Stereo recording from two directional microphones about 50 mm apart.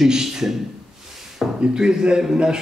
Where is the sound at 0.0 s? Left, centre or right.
Centre.